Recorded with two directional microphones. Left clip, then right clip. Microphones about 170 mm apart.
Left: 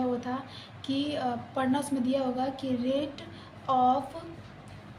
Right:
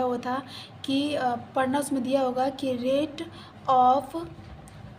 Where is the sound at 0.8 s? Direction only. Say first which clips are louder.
Right 4 dB; 45° right (ahead or behind).